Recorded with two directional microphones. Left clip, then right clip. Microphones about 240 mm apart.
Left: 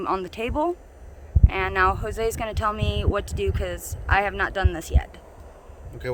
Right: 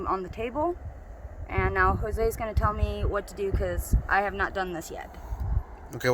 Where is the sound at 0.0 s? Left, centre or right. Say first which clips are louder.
Left 3 dB; left.